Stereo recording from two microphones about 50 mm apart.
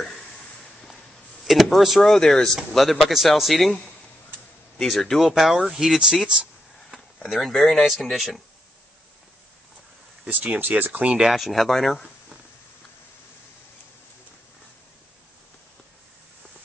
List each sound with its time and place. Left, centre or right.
0.0 s a sound: centre
1.4 s speech: centre
10.2 s speech: right
11.2 s speech: centre